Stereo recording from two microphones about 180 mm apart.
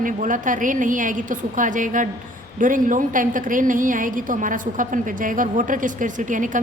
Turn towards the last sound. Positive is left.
turn(degrees=-45)  # may be behind; listen again after turning